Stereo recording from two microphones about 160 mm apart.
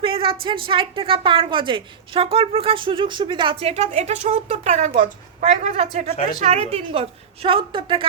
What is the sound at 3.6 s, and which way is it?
A woman's voice, 45° right (ahead or behind).